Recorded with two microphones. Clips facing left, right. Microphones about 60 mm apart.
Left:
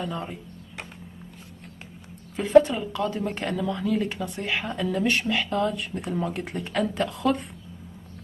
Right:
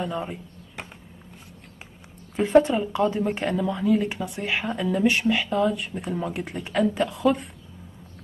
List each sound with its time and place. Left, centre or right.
0.0 s speech: centre
2.3 s a woman's voice: right; by 7.4 s centre